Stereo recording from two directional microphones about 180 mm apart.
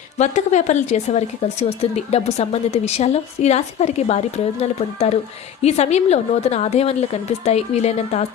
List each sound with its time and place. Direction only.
0.2 s speech: 40° left (ahead or behind)